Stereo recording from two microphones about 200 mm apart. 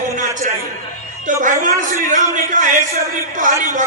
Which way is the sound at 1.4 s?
40° right (ahead or behind).